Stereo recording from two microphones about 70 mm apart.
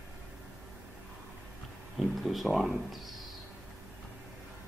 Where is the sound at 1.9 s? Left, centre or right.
Centre.